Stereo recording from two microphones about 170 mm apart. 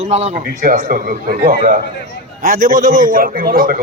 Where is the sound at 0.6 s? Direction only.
55° right (ahead or behind).